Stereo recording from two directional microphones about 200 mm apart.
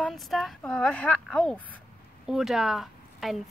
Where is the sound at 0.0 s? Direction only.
Centre (ahead or behind).